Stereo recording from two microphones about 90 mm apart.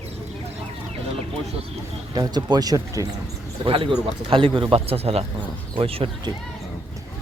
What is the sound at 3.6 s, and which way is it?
Speech, 75° right (ahead or behind).